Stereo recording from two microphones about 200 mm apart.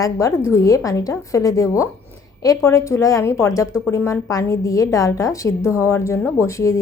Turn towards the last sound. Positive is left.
turn(degrees=15)  # may be behind; listen again after turning